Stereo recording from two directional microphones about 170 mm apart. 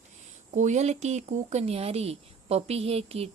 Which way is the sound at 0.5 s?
45° right (ahead or behind).